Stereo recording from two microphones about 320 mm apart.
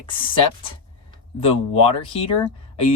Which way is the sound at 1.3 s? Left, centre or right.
Centre.